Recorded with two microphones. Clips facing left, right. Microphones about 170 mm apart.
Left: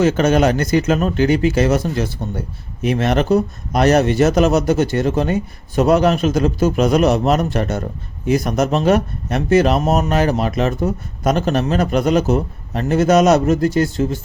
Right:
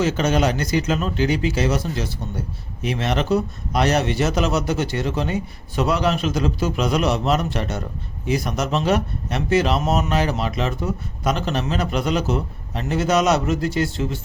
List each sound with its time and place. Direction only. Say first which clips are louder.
0.0 s speech: left 5 dB; 50° left (ahead or behind)